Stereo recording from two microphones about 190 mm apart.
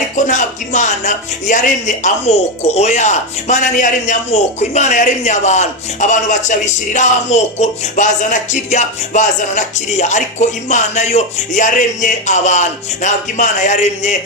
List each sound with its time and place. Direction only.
0.3 s speech: 40° left (ahead or behind)